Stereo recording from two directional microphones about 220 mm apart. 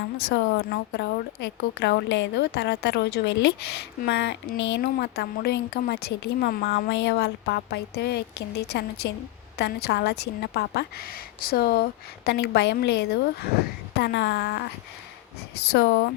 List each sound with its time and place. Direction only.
0.3 s a woman's voice: 50° left (ahead or behind)
15.7 s a woman's voice: 50° left (ahead or behind)